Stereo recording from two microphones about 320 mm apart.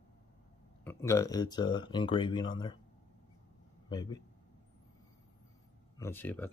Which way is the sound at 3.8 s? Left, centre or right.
Centre.